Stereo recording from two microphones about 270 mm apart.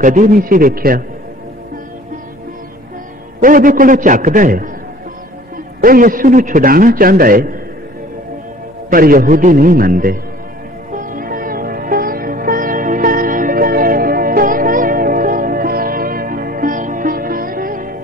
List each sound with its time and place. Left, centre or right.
0.0 s a man's voice: right
3.3 s a man's voice: right
5.8 s a man's voice: right
8.9 s a man's voice: right
11.0 s music: right